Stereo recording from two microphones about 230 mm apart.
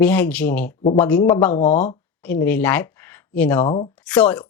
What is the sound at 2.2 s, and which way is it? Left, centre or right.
Speech, centre.